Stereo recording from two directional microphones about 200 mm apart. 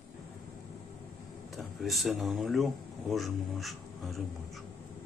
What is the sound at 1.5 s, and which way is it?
Speech, centre (ahead or behind).